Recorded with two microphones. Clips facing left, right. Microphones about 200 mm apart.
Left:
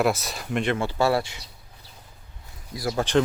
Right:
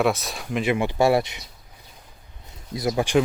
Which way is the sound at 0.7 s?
15° right (ahead or behind).